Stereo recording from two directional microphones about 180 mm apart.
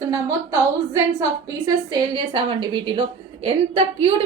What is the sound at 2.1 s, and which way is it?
A woman's voice, 25° right (ahead or behind).